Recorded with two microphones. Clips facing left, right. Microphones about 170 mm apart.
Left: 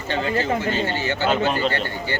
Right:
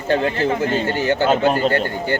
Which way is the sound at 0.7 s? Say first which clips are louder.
Right 5 dB; 45° right (ahead or behind).